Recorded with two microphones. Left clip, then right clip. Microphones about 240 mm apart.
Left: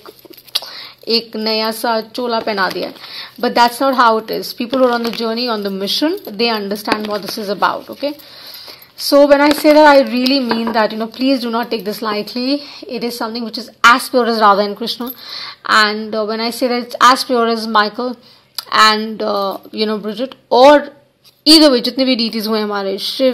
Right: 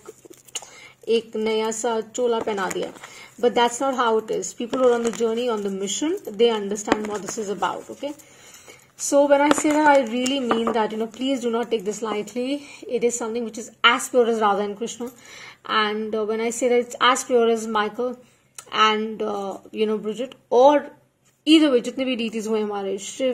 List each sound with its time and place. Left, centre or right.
1.0 s a woman's voice: left
9.1 s a woman's voice: left